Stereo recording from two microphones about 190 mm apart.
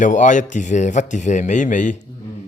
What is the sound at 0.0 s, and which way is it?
Speech, 40° left (ahead or behind).